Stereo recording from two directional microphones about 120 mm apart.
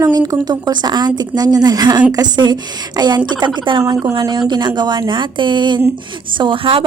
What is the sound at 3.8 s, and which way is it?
Speech, 40° right (ahead or behind).